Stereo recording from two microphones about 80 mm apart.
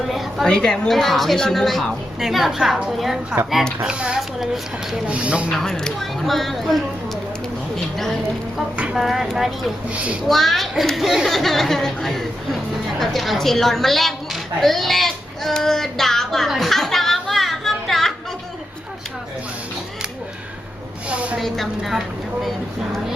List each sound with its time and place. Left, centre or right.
0.4 s a woman's voice: centre
5.0 s a woman's voice: centre
5.5 s a woman's voice: centre
8.8 s a woman's voice: centre
9.9 s a woman's voice: centre
10.2 s a woman's voice: centre
14.6 s child singing: centre
21.1 s a sound: centre
21.3 s a woman's voice: centre